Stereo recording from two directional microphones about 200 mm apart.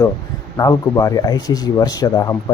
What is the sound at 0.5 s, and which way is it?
A man's voice, 15° left (ahead or behind).